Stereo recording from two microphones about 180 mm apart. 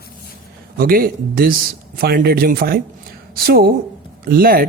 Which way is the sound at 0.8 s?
55° right (ahead or behind).